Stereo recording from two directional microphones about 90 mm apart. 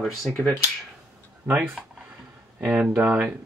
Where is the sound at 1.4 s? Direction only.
20° right (ahead or behind).